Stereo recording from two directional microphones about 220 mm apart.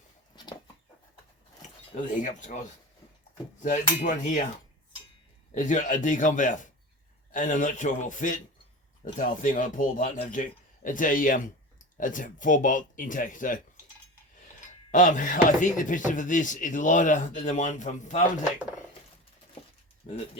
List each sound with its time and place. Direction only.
1.6 s speech: 35° left (ahead or behind)
5.5 s speech: 35° left (ahead or behind)
14.8 s speech: 35° left (ahead or behind)
20.0 s speech: 30° left (ahead or behind)